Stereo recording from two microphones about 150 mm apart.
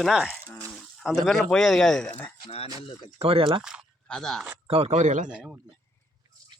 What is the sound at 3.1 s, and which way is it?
Speech, 40° right (ahead or behind).